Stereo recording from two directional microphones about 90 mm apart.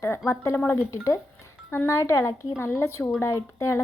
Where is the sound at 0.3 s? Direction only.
30° left (ahead or behind).